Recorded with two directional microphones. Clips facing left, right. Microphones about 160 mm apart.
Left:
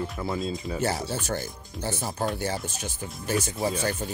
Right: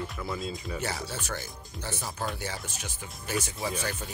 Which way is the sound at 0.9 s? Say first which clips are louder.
Left 6 dB; 35° left (ahead or behind).